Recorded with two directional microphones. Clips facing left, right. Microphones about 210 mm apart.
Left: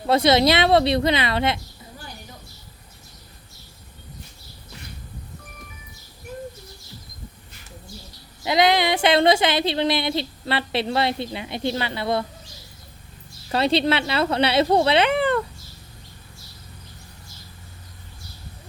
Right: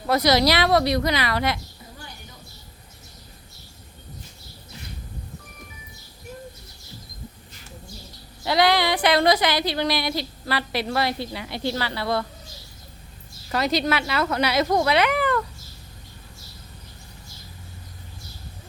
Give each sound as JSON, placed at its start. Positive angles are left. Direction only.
{"t": 0.1, "sound": "speech", "side_deg": 25}
{"t": 8.4, "sound": "speech", "side_deg": 20}
{"t": 13.5, "sound": "speech", "side_deg": 30}